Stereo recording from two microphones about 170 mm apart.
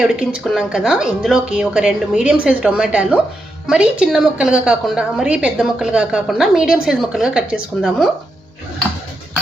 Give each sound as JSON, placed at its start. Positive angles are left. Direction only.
{"t": 0.0, "sound": "a woman's voice", "side_deg": -5}